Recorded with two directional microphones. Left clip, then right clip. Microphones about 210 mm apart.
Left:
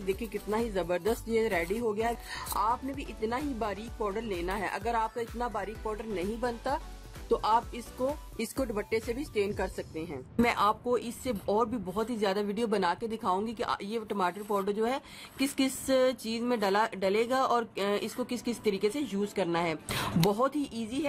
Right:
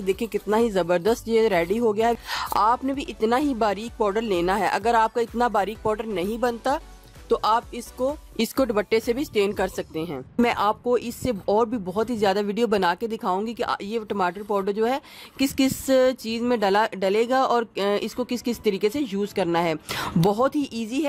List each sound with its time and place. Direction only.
0.0 s speech: 45° right (ahead or behind)